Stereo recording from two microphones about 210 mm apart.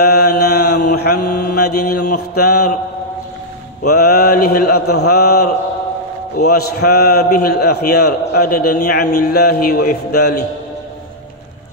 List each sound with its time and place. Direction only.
0.0 s mantra: 50° left (ahead or behind)
2.3 s a man's voice: 50° left (ahead or behind)
3.8 s a man's voice: 50° left (ahead or behind)